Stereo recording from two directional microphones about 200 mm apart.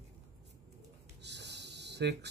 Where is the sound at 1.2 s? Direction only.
60° right (ahead or behind).